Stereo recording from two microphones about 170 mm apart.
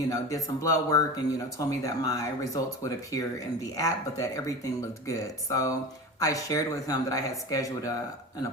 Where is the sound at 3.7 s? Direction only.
20° left (ahead or behind).